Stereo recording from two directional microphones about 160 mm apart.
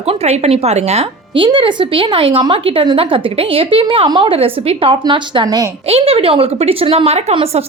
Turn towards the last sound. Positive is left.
turn(degrees=-40)  # may be behind; listen again after turning